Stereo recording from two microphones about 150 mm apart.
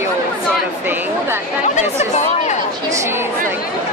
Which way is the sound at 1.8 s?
50° left (ahead or behind).